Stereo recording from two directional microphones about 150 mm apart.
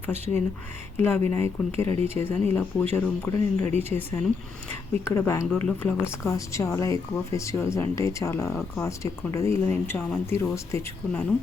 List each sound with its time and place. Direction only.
0.9 s speech: 15° left (ahead or behind)